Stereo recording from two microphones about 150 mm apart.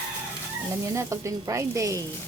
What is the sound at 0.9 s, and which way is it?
Speech, 20° right (ahead or behind).